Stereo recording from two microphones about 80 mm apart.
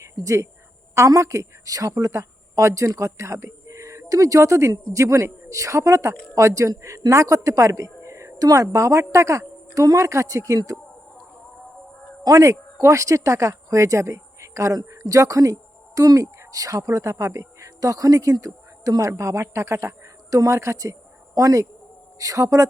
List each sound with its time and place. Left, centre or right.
0.0 s a woman's voice: right
12.2 s speech: right